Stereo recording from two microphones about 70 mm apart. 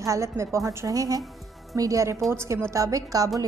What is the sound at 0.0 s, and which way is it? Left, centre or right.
A woman's voice, right.